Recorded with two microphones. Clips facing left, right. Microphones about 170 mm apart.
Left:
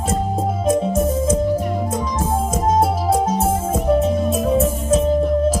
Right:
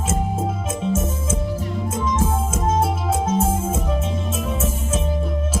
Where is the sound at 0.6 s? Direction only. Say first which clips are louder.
Left 6 dB; 35° left (ahead or behind).